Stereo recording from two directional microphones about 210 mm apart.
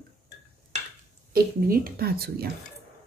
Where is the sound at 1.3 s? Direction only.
45° right (ahead or behind).